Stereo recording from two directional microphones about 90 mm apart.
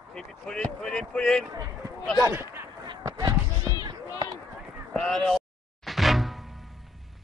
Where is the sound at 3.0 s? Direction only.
45° right (ahead or behind).